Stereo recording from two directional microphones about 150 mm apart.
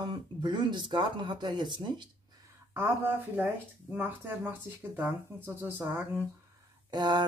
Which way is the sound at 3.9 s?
10° right (ahead or behind).